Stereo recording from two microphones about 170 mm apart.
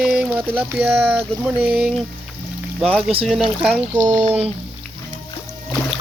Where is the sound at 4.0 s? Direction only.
20° right (ahead or behind).